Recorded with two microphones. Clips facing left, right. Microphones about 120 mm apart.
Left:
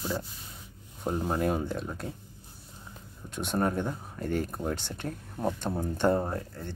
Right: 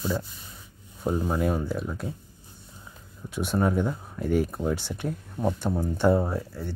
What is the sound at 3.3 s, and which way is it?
Speech, 5° right (ahead or behind).